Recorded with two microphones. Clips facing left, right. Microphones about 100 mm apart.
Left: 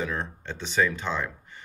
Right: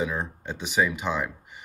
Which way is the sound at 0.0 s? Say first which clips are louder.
Right 2 dB; 15° right (ahead or behind).